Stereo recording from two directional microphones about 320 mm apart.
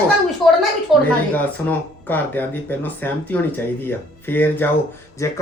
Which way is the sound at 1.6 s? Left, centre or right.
Centre.